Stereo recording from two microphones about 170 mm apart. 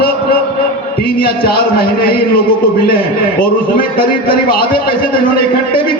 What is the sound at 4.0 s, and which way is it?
A man's voice, 60° left (ahead or behind).